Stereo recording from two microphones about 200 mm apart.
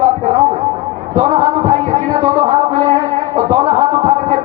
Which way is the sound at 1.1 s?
20° right (ahead or behind).